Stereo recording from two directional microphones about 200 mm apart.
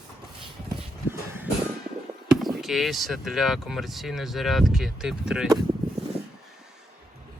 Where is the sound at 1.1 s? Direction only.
10° right (ahead or behind).